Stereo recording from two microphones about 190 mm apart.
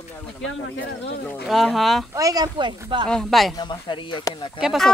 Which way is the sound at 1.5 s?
Centre (ahead or behind).